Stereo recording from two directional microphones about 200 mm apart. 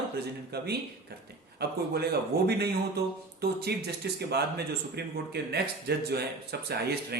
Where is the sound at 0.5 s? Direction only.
55° right (ahead or behind).